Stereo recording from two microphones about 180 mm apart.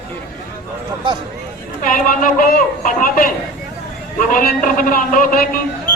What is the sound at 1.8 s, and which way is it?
A woman's voice, 50° left (ahead or behind).